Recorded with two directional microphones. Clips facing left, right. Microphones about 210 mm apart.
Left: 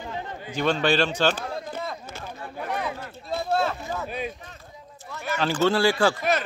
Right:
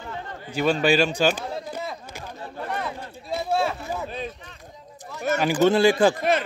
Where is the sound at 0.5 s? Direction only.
10° right (ahead or behind).